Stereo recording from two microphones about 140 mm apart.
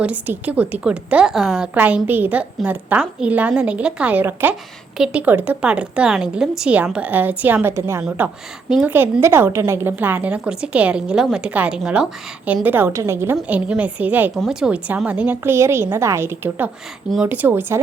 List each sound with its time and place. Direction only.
0.0 s a woman's voice: 10° right (ahead or behind)